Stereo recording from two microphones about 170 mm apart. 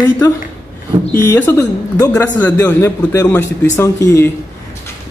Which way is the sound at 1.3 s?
15° left (ahead or behind).